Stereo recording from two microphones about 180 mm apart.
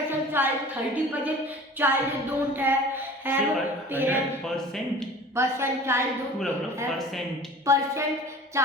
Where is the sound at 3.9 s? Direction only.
10° right (ahead or behind).